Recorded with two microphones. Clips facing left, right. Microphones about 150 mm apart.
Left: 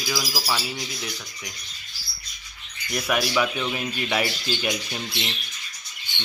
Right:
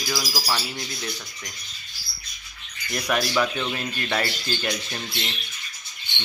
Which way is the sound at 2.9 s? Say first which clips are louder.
Even; 5° left (ahead or behind).